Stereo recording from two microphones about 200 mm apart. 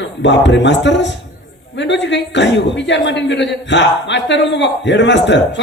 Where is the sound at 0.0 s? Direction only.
65° left (ahead or behind).